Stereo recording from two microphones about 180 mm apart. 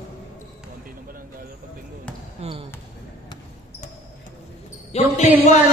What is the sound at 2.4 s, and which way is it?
Basketball bounce, 35° right (ahead or behind).